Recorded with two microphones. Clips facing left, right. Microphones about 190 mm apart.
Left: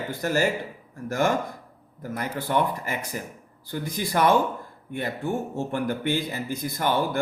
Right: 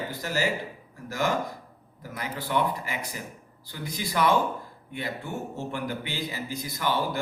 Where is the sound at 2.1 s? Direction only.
50° left (ahead or behind).